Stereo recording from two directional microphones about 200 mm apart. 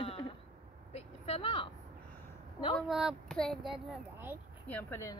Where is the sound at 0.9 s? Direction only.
30° left (ahead or behind).